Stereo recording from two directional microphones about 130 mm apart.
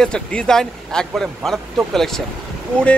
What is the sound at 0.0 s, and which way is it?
A man's voice, 5° left (ahead or behind).